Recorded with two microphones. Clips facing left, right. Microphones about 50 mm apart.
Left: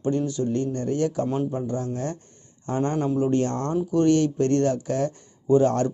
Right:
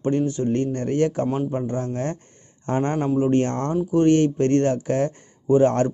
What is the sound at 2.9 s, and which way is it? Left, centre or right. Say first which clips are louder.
Speech: right 2 dB; right.